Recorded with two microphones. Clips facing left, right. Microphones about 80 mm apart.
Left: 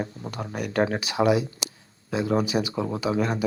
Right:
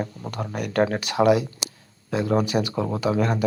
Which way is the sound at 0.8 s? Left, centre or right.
Centre.